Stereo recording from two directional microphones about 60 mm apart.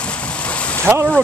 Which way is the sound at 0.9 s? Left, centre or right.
Right.